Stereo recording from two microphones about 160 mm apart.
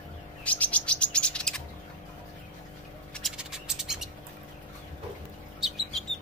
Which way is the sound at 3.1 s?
5° right (ahead or behind).